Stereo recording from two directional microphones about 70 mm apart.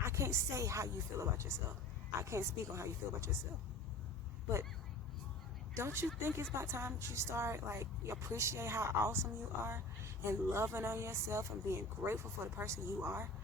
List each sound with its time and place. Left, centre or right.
0.0 s speech: right
5.7 s speech: right